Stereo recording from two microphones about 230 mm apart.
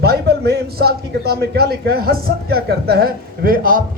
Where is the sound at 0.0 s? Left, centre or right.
Right.